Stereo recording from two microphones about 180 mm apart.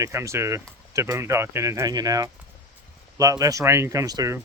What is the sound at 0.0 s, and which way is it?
Speech, 15° right (ahead or behind).